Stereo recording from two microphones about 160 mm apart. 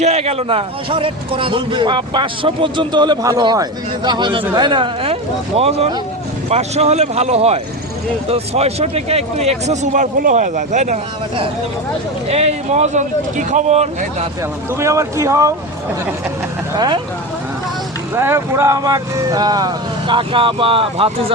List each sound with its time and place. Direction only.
0.0 s a man's voice: 40° right (ahead or behind)
12.3 s speech: 40° right (ahead or behind)
14.7 s speech: 15° right (ahead or behind)
16.7 s speech: 25° right (ahead or behind)
18.1 s speech: 15° right (ahead or behind); by 21.3 s 35° right (ahead or behind)